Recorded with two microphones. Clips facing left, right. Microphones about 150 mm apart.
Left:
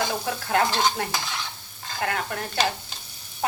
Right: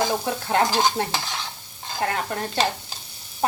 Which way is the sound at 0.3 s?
25° right (ahead or behind).